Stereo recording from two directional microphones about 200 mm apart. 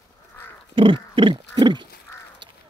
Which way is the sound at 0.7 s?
25° right (ahead or behind).